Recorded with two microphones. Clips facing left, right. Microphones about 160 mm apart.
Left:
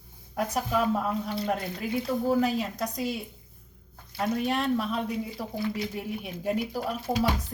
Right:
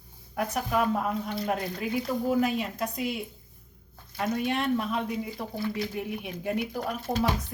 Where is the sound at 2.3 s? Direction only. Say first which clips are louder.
Left 1 dB; 35° left (ahead or behind).